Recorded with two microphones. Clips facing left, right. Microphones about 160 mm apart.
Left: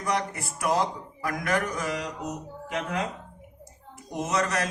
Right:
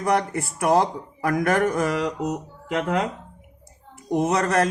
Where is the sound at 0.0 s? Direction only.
55° right (ahead or behind).